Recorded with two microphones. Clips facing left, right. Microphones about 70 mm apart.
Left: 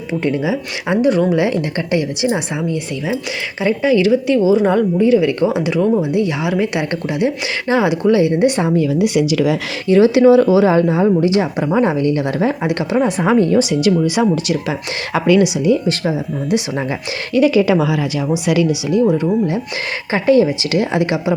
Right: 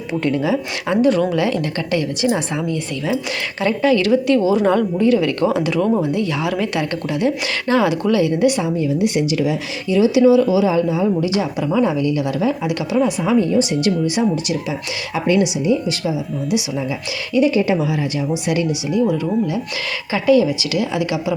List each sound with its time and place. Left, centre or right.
0.2 s speech: centre
1.4 s a woman's voice: left
3.6 s a woman's voice: centre; by 8.6 s left
8.7 s speech: left
9.9 s a woman's voice: left
14.2 s speech: left
16.0 s a woman's voice: left
17.3 s speech: left
19.0 s a woman's voice: left